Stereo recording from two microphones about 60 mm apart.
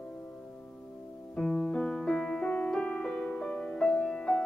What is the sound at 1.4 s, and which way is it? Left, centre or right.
Music, centre.